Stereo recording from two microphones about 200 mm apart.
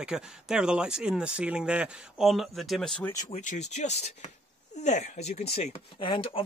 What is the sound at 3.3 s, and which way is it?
Speech, 35° left (ahead or behind).